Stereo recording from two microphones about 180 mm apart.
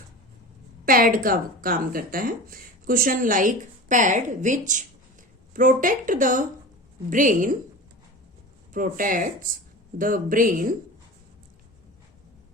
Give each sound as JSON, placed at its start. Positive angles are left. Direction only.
{"t": 0.9, "sound": "speech", "side_deg": -50}
{"t": 8.7, "sound": "speech", "side_deg": -50}